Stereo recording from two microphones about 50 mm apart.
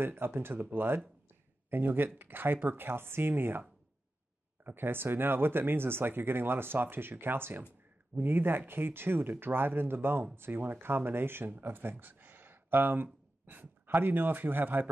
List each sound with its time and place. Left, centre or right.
0.0 s speech: right
4.6 s speech: right